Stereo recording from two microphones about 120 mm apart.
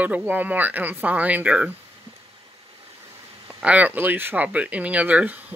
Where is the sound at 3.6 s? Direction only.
10° right (ahead or behind).